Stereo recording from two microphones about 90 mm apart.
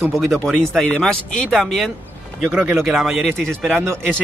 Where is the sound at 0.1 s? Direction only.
Centre (ahead or behind).